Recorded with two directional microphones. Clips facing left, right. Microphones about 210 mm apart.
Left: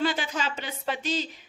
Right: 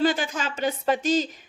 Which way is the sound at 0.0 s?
45° right (ahead or behind).